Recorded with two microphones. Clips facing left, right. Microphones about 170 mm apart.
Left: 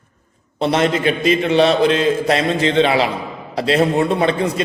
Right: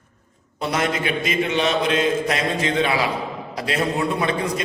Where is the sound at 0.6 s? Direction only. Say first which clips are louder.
Left 6 dB; 30° left (ahead or behind).